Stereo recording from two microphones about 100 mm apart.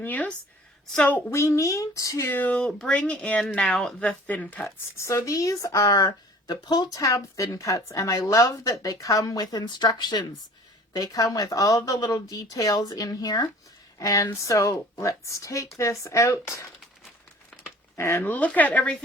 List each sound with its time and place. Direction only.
0.0 s speech: 15° left (ahead or behind)
1.3 s speech: 30° left (ahead or behind)
2.3 s speech: 15° left (ahead or behind)
4.9 s speech: 30° left (ahead or behind)
17.9 s speech: 25° left (ahead or behind)